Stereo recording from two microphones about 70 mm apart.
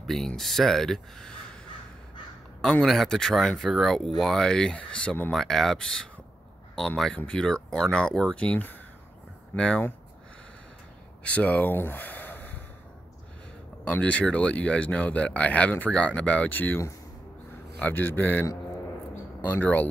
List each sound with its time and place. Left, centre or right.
0.0 s speech: centre
2.8 s speech: centre
5.3 s speech: centre
7.2 s speech: centre
11.2 s speech: centre
13.8 s speech: centre